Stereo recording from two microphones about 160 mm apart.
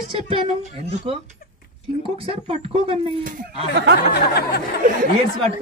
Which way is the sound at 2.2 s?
40° right (ahead or behind).